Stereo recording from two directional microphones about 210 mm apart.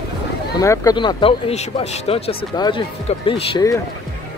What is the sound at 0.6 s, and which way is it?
Speech, 15° left (ahead or behind).